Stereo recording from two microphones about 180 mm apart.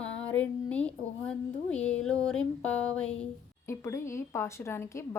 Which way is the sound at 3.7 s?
15° left (ahead or behind).